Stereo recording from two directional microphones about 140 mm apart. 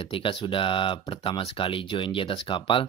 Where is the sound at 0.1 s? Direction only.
40° left (ahead or behind).